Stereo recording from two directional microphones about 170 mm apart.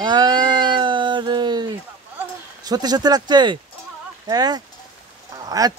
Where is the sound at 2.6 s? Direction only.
25° right (ahead or behind).